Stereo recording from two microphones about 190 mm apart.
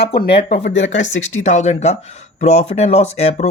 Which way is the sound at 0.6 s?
70° left (ahead or behind).